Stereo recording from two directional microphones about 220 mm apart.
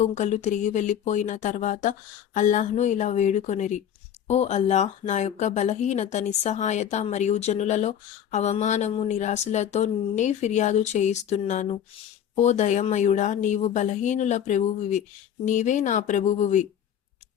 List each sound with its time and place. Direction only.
0.0 s speech: 30° left (ahead or behind)